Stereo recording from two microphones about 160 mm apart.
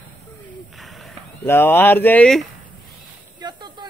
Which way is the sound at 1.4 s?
15° left (ahead or behind).